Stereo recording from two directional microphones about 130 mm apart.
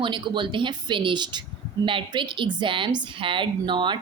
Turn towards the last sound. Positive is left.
turn(degrees=-35)  # may be behind; listen again after turning